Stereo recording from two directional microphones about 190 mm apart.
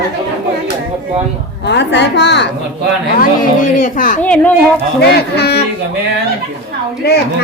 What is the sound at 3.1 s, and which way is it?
A woman's voice, 45° left (ahead or behind).